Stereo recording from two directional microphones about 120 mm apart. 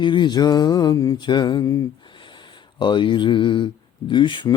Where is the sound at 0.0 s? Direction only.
40° left (ahead or behind).